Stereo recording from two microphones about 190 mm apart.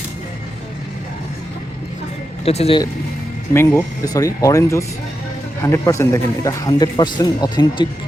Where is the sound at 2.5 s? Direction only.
30° left (ahead or behind).